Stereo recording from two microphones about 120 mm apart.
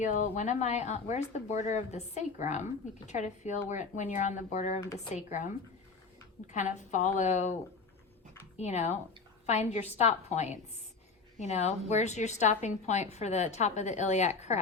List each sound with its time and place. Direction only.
0.0 s a woman's voice: 85° left
3.7 s speech: 90° left
6.5 s speech: 80° left
8.5 s a woman's voice: 70° left (ahead or behind)